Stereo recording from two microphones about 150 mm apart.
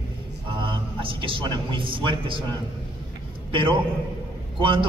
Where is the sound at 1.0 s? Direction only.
35° right (ahead or behind).